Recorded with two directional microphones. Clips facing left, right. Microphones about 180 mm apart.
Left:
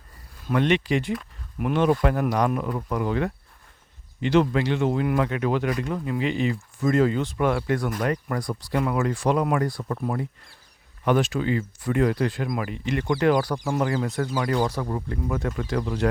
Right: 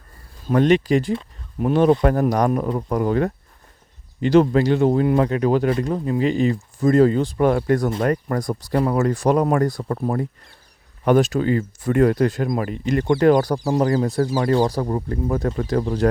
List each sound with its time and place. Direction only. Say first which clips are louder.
0.4 s speech: right 6 dB; 40° right (ahead or behind)